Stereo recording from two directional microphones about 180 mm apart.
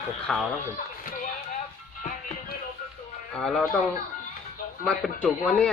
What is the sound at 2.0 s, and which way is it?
Music, 45° left (ahead or behind).